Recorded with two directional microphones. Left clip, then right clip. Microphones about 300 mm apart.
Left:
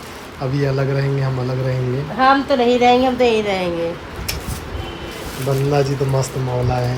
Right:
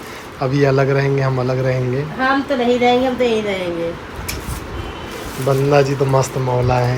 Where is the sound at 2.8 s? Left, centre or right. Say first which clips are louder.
Left 1 dB; left.